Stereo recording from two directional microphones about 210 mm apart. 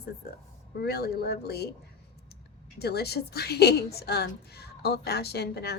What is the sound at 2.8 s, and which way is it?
A woman's voice, 50° left (ahead or behind).